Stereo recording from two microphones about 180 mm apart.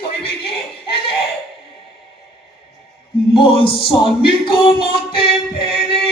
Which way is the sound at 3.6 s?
30° left (ahead or behind).